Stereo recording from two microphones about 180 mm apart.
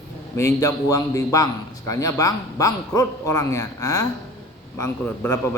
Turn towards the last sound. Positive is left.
turn(degrees=15)  # may be behind; listen again after turning